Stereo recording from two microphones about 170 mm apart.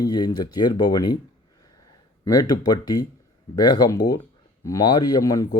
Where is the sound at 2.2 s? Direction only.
20° left (ahead or behind).